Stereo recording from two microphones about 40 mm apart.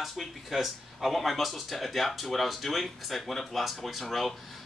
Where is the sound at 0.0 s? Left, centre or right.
Centre.